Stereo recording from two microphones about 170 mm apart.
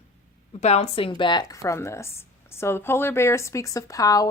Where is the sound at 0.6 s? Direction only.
40° left (ahead or behind).